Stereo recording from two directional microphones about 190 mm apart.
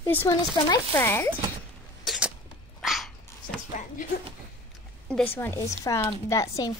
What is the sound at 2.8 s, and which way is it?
Dog, centre (ahead or behind).